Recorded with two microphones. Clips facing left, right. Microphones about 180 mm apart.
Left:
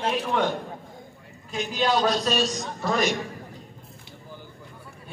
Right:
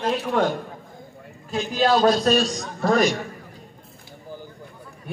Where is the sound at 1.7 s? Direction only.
50° right (ahead or behind).